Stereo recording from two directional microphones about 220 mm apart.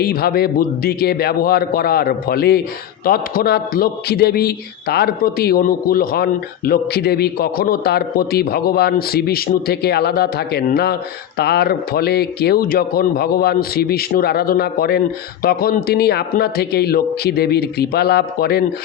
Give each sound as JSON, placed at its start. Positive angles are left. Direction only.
{"t": 0.0, "sound": "a man's voice", "side_deg": 45}